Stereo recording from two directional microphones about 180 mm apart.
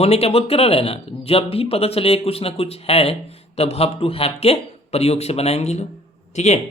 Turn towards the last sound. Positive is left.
turn(degrees=40)  # may be behind; listen again after turning